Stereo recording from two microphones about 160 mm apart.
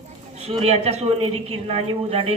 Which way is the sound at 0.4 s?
40° right (ahead or behind).